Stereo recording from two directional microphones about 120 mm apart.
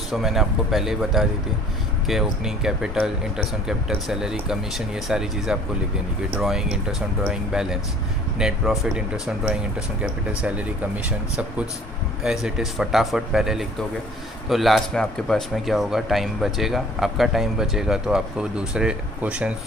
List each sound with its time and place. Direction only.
0.1 s speech: centre (ahead or behind)